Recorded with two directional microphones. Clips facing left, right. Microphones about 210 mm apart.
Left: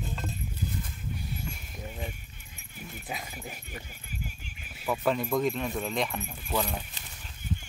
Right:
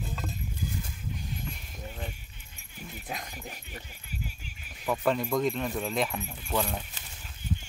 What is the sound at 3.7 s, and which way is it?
Dog, 45° left (ahead or behind).